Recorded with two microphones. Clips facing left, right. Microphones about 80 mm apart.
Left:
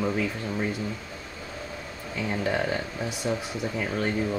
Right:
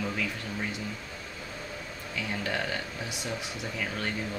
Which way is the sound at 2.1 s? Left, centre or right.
Left.